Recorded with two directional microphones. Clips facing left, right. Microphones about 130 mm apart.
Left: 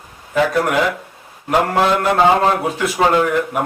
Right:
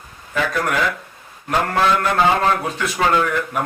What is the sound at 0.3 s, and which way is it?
A man's voice, 20° left (ahead or behind).